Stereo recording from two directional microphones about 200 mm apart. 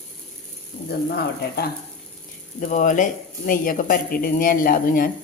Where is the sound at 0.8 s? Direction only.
50° left (ahead or behind).